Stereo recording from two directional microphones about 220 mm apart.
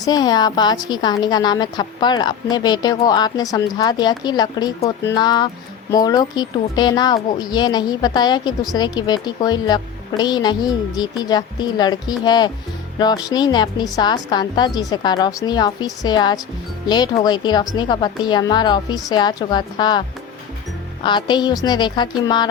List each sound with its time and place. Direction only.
0.0 s speech: 20° left (ahead or behind)